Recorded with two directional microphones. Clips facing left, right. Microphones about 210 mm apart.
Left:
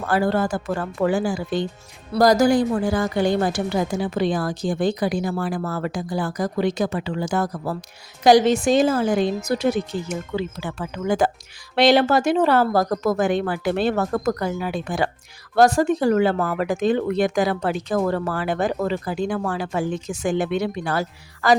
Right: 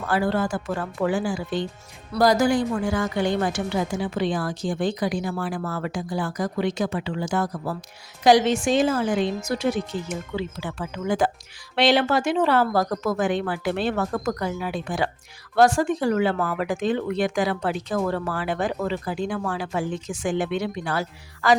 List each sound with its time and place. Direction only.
0.0 s speech: 40° left (ahead or behind)